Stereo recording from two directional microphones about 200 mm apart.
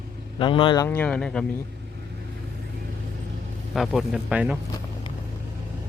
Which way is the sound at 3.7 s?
Centre (ahead or behind).